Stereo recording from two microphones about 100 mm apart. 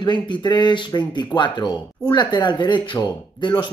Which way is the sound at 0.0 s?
50° left (ahead or behind).